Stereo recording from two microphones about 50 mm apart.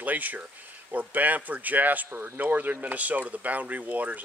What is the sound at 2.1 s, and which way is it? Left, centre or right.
Speech, right.